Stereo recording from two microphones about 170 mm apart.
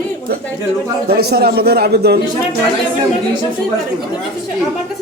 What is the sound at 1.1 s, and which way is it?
A man's voice, 70° right (ahead or behind).